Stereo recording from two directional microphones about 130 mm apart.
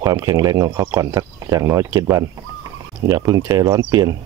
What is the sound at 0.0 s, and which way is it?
Speech, 25° right (ahead or behind).